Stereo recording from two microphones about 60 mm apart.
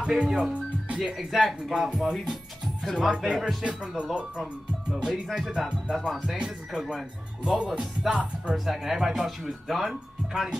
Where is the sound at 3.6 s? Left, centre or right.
Centre.